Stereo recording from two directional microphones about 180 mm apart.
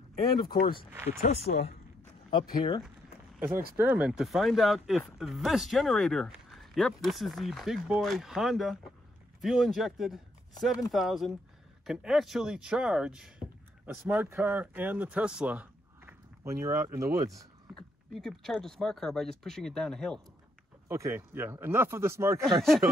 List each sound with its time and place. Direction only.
1.2 s speech: 65° left (ahead or behind)
2.3 s speech: 25° left (ahead or behind)
3.7 s speech: 10° right (ahead or behind)
17.7 s speech: centre (ahead or behind)
20.9 s speech: 15° right (ahead or behind)
22.4 s speech: centre (ahead or behind)